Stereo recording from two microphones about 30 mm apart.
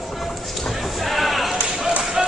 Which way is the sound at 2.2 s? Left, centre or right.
Centre.